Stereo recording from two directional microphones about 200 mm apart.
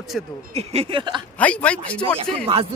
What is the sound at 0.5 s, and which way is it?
Speech, 30° right (ahead or behind).